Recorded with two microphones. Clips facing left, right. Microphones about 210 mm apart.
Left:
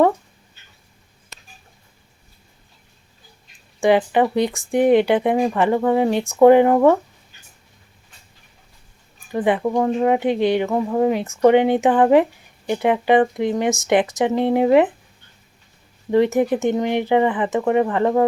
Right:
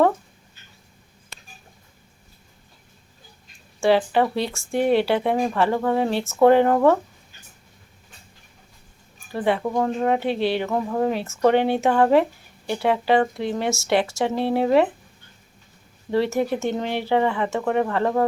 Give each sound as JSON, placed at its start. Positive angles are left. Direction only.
{"t": 3.8, "sound": "speech", "side_deg": 15}
{"t": 9.3, "sound": "speech", "side_deg": 15}
{"t": 16.1, "sound": "speech", "side_deg": 15}